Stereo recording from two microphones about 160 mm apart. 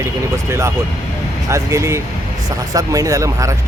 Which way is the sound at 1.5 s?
15° right (ahead or behind).